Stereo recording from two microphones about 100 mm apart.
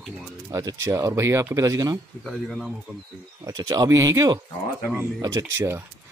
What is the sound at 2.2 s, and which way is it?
Speech, centre (ahead or behind).